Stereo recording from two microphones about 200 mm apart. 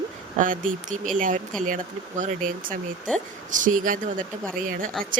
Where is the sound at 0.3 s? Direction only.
40° right (ahead or behind).